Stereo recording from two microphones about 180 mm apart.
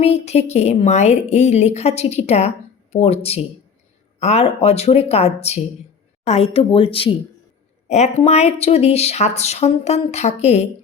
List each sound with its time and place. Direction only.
0.0 s speech: 35° left (ahead or behind)